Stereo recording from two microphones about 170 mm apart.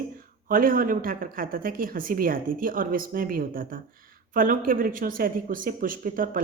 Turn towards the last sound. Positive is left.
turn(degrees=-55)  # may be behind; listen again after turning